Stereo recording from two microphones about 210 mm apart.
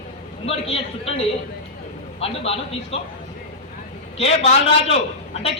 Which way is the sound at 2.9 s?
30° left (ahead or behind).